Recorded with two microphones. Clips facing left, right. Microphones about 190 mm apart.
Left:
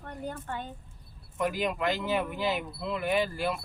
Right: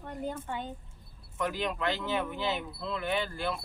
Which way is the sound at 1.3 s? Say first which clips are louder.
Left 3 dB; 10° left (ahead or behind).